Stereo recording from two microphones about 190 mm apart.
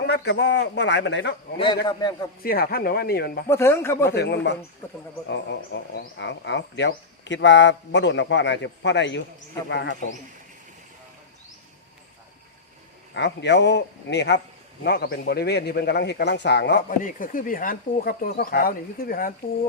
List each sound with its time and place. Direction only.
0.1 s speech: 65° left (ahead or behind)
1.5 s a man's voice: 25° left (ahead or behind)
2.4 s speech: 50° left (ahead or behind)
3.5 s speech: 15° left (ahead or behind)
4.1 s speech: 60° left (ahead or behind)
13.1 s speech: 65° left (ahead or behind)
17.0 s speech: 45° left (ahead or behind)